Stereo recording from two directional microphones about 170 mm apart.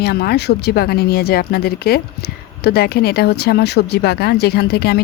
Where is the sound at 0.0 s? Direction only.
65° left (ahead or behind).